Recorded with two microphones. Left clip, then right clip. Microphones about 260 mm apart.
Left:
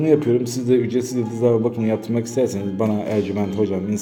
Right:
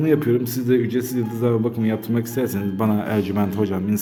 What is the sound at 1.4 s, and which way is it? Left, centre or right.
Speech, right.